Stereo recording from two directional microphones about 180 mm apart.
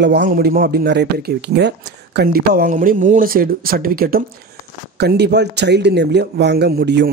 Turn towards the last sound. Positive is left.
turn(degrees=-65)  # may be behind; listen again after turning